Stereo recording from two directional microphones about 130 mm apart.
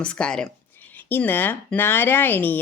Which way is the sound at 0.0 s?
5° left (ahead or behind).